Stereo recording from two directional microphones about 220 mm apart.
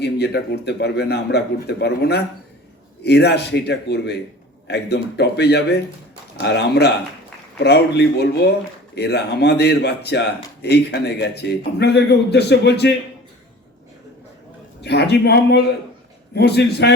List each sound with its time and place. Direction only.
0.0 s speech: 50° left (ahead or behind)
14.8 s speech: 50° left (ahead or behind)